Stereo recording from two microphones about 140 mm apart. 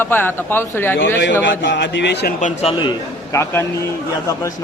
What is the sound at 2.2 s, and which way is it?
Speech, 60° left (ahead or behind).